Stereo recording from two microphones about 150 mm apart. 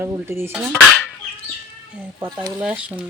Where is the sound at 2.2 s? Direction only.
30° right (ahead or behind).